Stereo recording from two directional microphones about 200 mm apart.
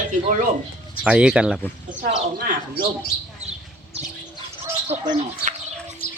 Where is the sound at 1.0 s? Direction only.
5° right (ahead or behind).